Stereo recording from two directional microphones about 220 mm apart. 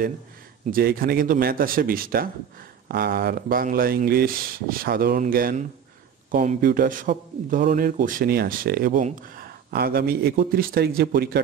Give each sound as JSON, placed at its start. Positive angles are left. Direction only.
{"t": 0.7, "sound": "a man's voice", "side_deg": -40}